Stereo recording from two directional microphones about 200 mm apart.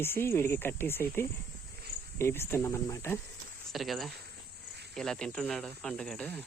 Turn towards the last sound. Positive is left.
turn(degrees=5)  # may be behind; listen again after turning